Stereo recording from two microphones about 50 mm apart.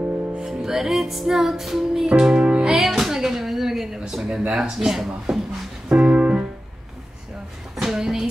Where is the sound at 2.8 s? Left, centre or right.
Centre.